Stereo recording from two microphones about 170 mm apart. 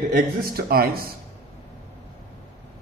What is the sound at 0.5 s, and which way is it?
Speech, 60° right (ahead or behind).